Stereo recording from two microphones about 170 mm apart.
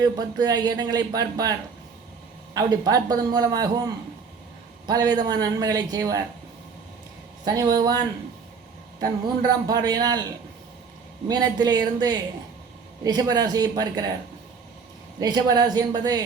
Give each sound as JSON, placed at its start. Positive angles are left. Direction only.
{"t": 0.0, "sound": "speech", "side_deg": -25}
{"t": 2.6, "sound": "speech", "side_deg": -20}
{"t": 7.4, "sound": "speech", "side_deg": -20}
{"t": 9.0, "sound": "speech", "side_deg": -20}
{"t": 11.3, "sound": "speech", "side_deg": -25}
{"t": 15.2, "sound": "speech", "side_deg": -25}